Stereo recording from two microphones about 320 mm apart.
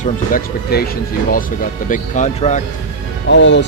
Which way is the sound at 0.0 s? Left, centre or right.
Left.